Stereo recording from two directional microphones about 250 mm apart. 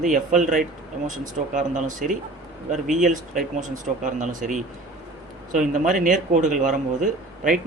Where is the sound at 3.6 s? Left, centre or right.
Right.